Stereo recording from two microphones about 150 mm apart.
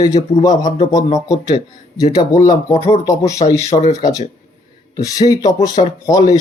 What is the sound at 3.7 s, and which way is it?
Speech, 45° left (ahead or behind).